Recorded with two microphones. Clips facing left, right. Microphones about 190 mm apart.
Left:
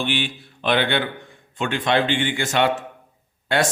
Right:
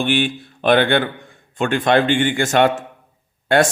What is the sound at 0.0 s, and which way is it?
A man's voice, 50° right (ahead or behind).